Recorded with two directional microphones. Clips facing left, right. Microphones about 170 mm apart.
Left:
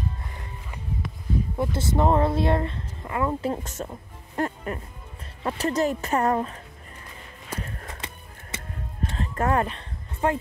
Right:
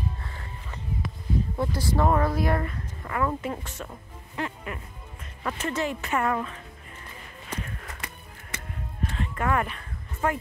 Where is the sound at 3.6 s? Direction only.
40° left (ahead or behind).